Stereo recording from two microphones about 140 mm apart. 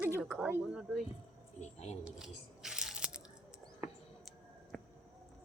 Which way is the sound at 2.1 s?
5° right (ahead or behind).